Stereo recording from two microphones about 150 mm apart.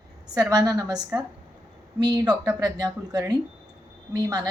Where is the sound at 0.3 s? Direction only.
25° right (ahead or behind).